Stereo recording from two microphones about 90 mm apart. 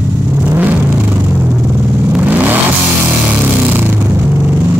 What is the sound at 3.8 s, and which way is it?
Vehicle, 20° right (ahead or behind).